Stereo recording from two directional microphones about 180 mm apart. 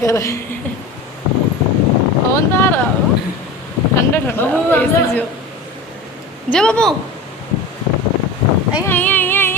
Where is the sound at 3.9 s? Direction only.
10° left (ahead or behind).